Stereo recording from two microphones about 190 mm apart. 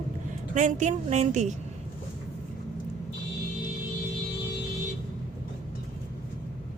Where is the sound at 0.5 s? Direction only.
40° right (ahead or behind).